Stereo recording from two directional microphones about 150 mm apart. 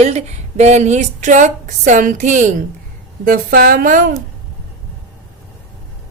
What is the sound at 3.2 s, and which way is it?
Speech, 80° right.